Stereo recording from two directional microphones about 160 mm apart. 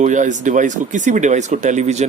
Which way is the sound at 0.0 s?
50° right (ahead or behind).